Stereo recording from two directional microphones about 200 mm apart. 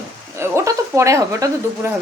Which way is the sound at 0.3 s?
15° right (ahead or behind).